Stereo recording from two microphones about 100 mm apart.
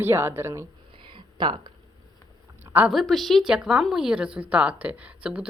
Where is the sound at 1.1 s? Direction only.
50° right (ahead or behind).